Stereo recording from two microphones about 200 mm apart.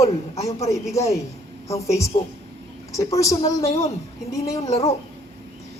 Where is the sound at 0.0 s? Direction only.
15° left (ahead or behind).